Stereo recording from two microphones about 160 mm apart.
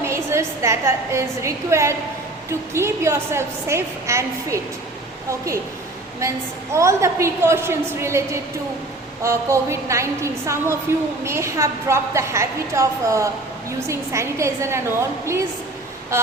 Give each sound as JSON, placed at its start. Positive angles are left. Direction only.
{"t": 0.0, "sound": "a woman's voice", "side_deg": -15}
{"t": 6.1, "sound": "a woman's voice", "side_deg": -20}